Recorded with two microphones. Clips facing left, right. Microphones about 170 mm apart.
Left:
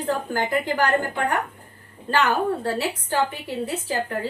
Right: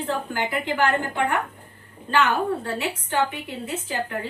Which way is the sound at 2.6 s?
35° left (ahead or behind).